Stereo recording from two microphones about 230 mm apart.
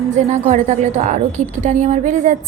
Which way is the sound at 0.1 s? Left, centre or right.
Right.